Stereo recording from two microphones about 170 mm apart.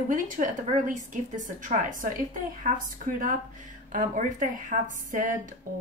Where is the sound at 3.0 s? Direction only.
55° right (ahead or behind).